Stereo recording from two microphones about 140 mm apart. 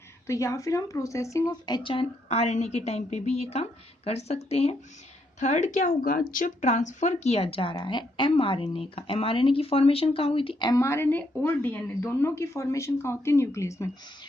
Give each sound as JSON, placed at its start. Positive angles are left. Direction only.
{"t": 0.3, "sound": "speech", "side_deg": 20}